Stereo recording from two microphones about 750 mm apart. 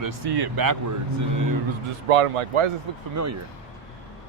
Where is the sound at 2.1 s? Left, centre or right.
Right.